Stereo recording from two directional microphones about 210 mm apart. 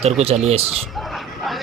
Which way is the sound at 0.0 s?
30° right (ahead or behind).